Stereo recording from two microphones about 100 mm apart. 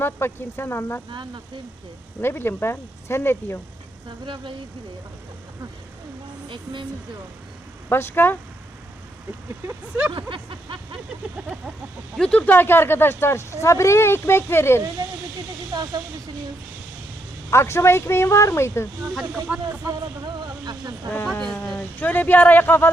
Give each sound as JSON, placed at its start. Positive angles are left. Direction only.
{"t": 0.0, "sound": "speech", "side_deg": 20}
{"t": 2.2, "sound": "speech", "side_deg": 25}
{"t": 7.9, "sound": "speech", "side_deg": 20}
{"t": 9.6, "sound": "speech", "side_deg": -20}
{"t": 10.1, "sound": "a sound", "side_deg": -60}
{"t": 12.1, "sound": "speech", "side_deg": 5}
{"t": 12.5, "sound": "speech", "side_deg": 20}
{"t": 15.0, "sound": "speech", "side_deg": -35}
{"t": 17.5, "sound": "speech", "side_deg": 25}
{"t": 19.2, "sound": "speech", "side_deg": -15}
{"t": 19.9, "sound": "speech", "side_deg": -45}
{"t": 21.3, "sound": "speech", "side_deg": 10}